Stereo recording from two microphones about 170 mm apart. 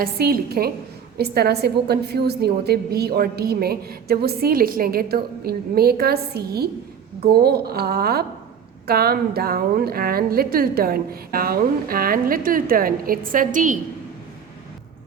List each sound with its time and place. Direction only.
0.0 s a woman's voice: 60° right (ahead or behind)